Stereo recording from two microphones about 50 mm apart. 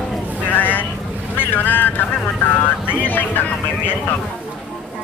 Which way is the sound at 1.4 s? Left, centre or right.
Left.